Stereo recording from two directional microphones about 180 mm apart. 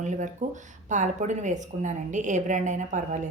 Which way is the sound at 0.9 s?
40° right (ahead or behind).